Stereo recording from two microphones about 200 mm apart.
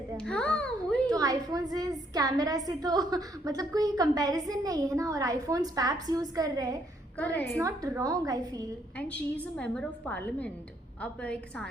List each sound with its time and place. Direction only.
0.2 s a child's voice: 5° left (ahead or behind)
1.1 s a woman's voice: 15° right (ahead or behind)
7.2 s a woman's voice: 10° left (ahead or behind)
7.6 s a woman's voice: 15° right (ahead or behind)
9.0 s a woman's voice: 5° left (ahead or behind)